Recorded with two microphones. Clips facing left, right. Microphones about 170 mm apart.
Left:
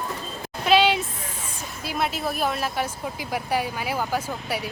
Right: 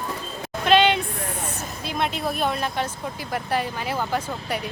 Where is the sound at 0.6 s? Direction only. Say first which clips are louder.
Right 1 dB; 5° left (ahead or behind).